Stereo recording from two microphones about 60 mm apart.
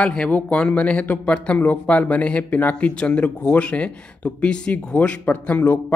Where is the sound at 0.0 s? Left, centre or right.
Centre.